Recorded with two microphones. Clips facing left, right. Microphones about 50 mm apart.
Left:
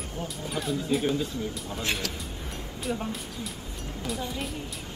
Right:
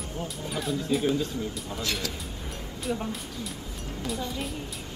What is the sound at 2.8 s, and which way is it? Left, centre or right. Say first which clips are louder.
Speech: right 1 dB; centre.